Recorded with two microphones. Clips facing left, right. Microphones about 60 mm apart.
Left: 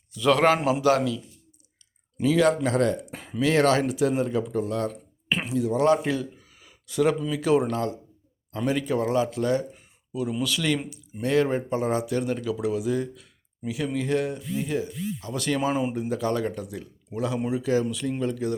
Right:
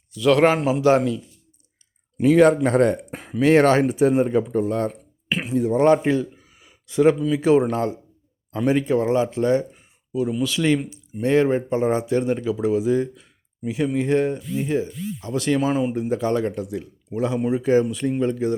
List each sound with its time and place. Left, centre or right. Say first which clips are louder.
0.1 s a man's voice: right 4 dB; centre
0.3 s speech: right 3 dB; centre
2.2 s speech: right 6 dB; right
3.4 s speech: right 5 dB; right
5.3 s a sound: right 2 dB; centre
5.5 s a man's voice: right 5 dB; right
9.7 s a sound: right 6 dB; centre
10.4 s speech: right 5 dB; centre
15.6 s speech: right 4 dB; centre
16.0 s speech: right 4 dB; right
17.5 s speech: right 7 dB; right
18.2 s speech: right 6 dB; right